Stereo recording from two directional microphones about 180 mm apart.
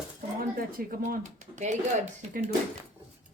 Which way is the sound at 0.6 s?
50° right (ahead or behind).